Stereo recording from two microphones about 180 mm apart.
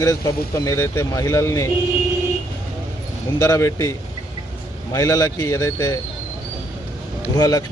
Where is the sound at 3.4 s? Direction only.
15° left (ahead or behind).